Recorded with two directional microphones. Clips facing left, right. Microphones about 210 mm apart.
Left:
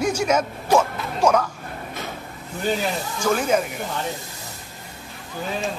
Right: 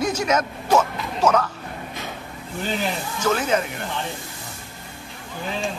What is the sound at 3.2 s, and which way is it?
Speech, 10° left (ahead or behind).